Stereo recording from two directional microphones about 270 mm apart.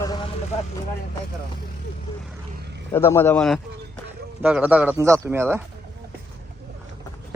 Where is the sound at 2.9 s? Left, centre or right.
Centre.